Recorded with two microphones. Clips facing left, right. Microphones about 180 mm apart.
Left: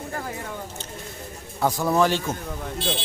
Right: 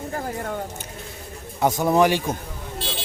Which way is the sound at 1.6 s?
20° right (ahead or behind).